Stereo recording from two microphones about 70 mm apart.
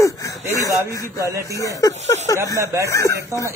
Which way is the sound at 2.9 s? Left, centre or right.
Left.